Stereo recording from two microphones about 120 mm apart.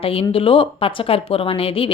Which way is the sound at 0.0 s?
50° left (ahead or behind).